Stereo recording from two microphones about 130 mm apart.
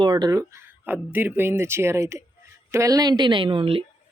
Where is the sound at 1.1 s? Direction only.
15° right (ahead or behind).